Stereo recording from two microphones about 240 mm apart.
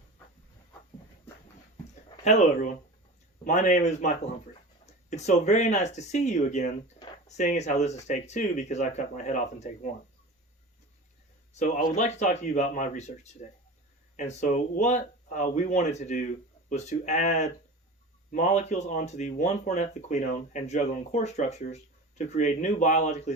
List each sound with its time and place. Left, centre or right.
2.0 s speech: left
11.6 s speech: left